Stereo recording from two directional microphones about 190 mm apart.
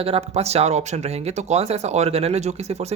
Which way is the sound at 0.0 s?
30° right (ahead or behind).